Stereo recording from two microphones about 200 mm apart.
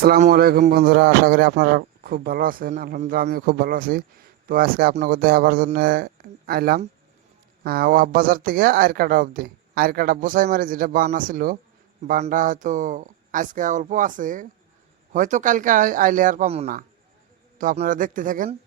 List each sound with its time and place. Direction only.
0.3 s speech: 50° right (ahead or behind)